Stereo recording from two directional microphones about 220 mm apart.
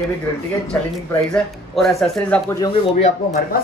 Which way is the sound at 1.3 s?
Centre (ahead or behind).